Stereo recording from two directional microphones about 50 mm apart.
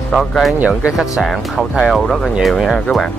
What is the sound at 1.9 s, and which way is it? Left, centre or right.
Speech, centre.